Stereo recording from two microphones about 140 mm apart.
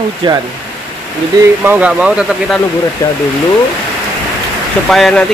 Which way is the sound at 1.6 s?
10° right (ahead or behind).